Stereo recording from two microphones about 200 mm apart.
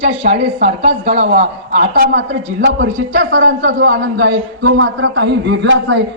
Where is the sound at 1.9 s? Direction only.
50° right (ahead or behind).